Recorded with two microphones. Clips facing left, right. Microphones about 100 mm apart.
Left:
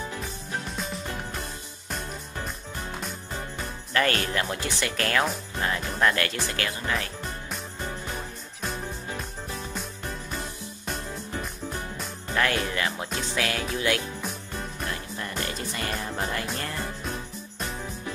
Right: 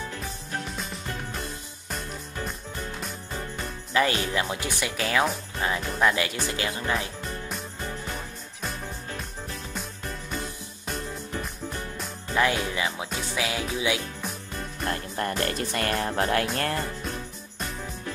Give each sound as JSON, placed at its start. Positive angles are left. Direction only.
{"t": 0.7, "sound": "music", "side_deg": 0}
{"t": 3.9, "sound": "speech", "side_deg": -10}
{"t": 8.1, "sound": "music", "side_deg": 0}
{"t": 12.4, "sound": "speech", "side_deg": -15}
{"t": 14.9, "sound": "music", "side_deg": -55}